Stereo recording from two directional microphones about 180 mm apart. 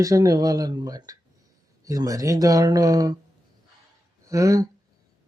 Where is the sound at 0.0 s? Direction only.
20° right (ahead or behind).